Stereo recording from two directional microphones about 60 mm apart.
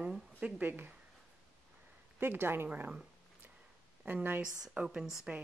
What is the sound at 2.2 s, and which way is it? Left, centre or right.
Speech, right.